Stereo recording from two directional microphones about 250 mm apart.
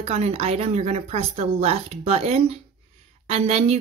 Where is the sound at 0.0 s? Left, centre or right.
Right.